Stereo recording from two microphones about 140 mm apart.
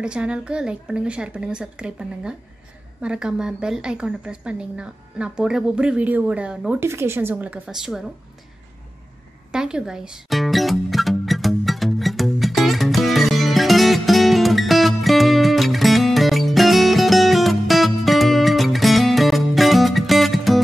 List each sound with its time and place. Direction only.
0.0 s a woman's voice: 5° right (ahead or behind)
6.8 s a woman's voice: 20° right (ahead or behind)
9.5 s music: 5° right (ahead or behind)